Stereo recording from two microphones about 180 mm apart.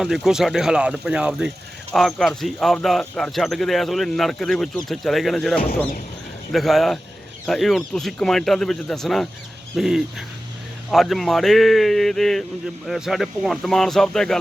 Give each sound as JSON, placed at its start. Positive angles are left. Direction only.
{"t": 0.0, "sound": "speech", "side_deg": 0}